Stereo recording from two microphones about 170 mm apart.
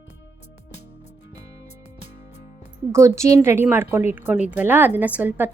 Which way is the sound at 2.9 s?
15° right (ahead or behind).